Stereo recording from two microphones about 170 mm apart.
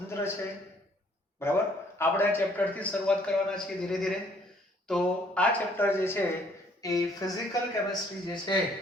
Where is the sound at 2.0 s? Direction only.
15° left (ahead or behind).